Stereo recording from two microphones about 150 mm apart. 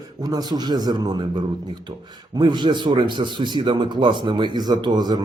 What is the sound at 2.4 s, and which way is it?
A man's voice, 30° right (ahead or behind).